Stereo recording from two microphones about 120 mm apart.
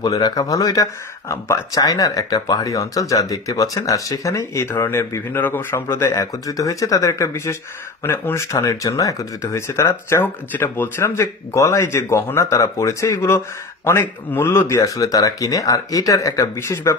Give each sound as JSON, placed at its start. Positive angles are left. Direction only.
{"t": 0.0, "sound": "speech", "side_deg": 35}
{"t": 14.8, "sound": "speech", "side_deg": 30}